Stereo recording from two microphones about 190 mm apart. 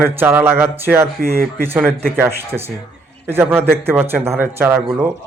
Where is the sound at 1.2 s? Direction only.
55° right (ahead or behind).